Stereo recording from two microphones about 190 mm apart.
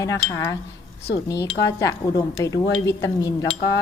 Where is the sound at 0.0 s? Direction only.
20° left (ahead or behind).